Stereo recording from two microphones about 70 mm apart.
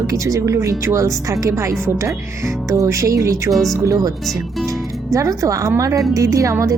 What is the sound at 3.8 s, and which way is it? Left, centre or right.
Speech, right.